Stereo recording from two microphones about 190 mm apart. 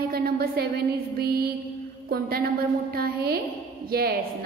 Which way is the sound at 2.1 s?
55° right (ahead or behind).